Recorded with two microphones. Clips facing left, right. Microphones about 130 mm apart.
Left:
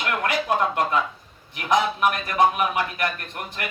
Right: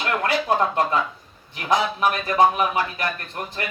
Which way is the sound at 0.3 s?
30° right (ahead or behind).